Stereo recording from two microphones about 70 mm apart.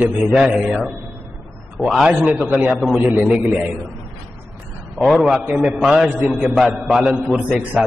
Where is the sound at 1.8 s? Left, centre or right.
Centre.